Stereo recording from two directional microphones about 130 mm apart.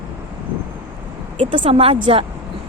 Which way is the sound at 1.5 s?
40° right (ahead or behind).